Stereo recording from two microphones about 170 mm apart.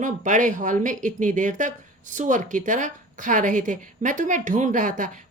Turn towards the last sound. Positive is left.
turn(degrees=-50)  # may be behind; listen again after turning